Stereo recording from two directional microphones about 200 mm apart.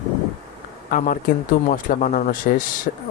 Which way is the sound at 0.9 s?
45° left (ahead or behind).